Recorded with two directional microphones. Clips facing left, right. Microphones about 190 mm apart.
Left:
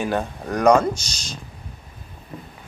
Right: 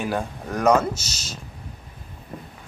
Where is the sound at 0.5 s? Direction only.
5° right (ahead or behind).